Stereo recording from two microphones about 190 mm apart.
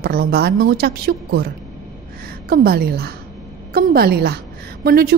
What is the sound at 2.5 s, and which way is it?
A woman's voice, 55° right (ahead or behind).